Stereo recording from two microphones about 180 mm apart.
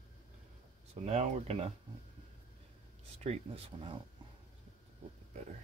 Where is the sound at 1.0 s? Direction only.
35° right (ahead or behind).